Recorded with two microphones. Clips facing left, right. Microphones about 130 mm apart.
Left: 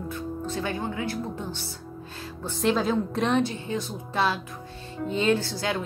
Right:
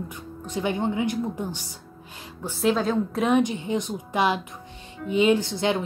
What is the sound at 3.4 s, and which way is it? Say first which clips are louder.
Speech: right 3 dB; 15° right (ahead or behind).